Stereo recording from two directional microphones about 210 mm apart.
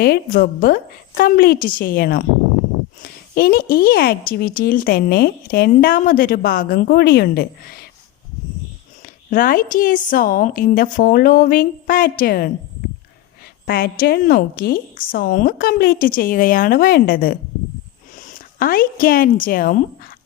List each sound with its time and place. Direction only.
0.0 s speech: 45° left (ahead or behind)
9.3 s a woman's voice: 40° left (ahead or behind)
13.7 s speech: 45° left (ahead or behind)